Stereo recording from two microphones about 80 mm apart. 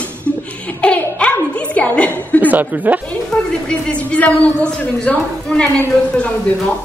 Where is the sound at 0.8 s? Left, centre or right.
Centre.